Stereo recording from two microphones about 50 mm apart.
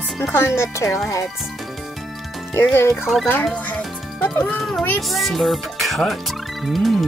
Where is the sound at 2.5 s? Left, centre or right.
Left.